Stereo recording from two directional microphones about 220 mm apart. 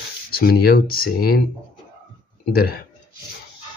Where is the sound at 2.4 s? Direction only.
45° left (ahead or behind).